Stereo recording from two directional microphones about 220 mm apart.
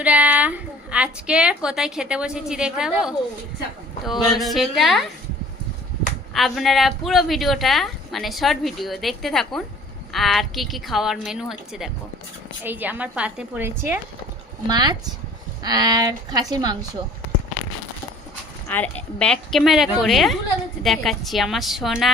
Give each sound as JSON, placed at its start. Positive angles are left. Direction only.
{"t": 0.0, "sound": "a woman's voice", "side_deg": -5}
{"t": 6.3, "sound": "a woman's voice", "side_deg": 0}
{"t": 18.7, "sound": "a woman's voice", "side_deg": 5}